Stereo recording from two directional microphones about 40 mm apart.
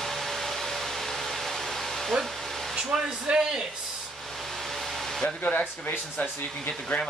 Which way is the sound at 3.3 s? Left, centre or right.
Right.